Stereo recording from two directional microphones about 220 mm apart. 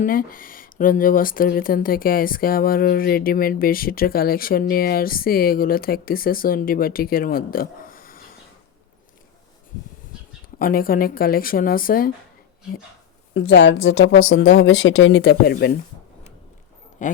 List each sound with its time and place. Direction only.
0.0 s speech: 40° left (ahead or behind)
10.6 s speech: 40° left (ahead or behind)
13.3 s a woman's voice: 55° left (ahead or behind)
17.0 s speech: 35° left (ahead or behind)